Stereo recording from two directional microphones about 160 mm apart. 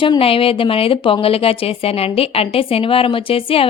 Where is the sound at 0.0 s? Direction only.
35° left (ahead or behind).